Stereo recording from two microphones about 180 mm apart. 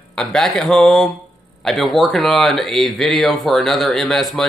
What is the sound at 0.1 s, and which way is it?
Speech, 5° left (ahead or behind).